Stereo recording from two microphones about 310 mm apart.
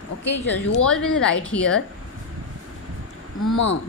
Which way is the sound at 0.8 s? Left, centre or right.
Centre.